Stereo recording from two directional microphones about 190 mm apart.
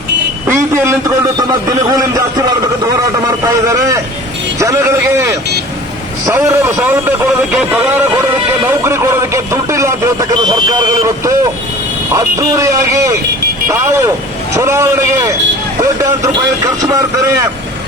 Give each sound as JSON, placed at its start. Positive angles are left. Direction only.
{"t": 0.4, "sound": "a man's voice", "side_deg": -15}
{"t": 3.4, "sound": "a man's voice", "side_deg": -15}